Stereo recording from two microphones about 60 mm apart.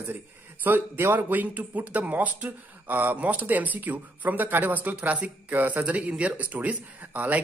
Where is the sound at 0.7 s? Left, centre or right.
Right.